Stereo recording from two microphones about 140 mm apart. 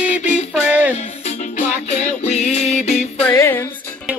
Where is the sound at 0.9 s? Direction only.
55° left (ahead or behind).